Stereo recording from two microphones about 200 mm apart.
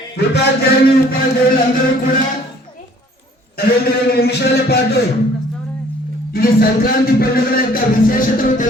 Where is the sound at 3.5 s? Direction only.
50° left (ahead or behind).